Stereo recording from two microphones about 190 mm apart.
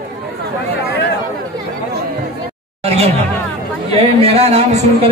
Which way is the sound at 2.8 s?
35° right (ahead or behind).